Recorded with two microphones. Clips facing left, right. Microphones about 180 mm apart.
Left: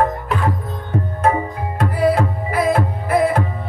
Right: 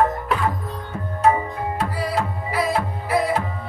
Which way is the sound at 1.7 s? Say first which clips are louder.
Left 9 dB; 50° left (ahead or behind).